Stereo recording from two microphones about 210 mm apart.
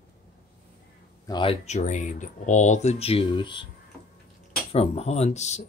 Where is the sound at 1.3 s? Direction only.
25° left (ahead or behind).